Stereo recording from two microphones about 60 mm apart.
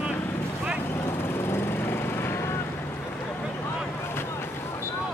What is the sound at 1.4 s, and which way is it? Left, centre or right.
Vehicle, left.